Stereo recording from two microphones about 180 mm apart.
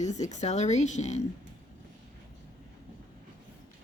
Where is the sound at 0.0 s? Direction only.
40° left (ahead or behind).